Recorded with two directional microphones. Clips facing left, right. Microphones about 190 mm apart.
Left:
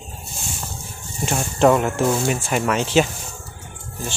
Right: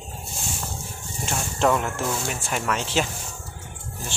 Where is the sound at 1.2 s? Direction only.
10° left (ahead or behind).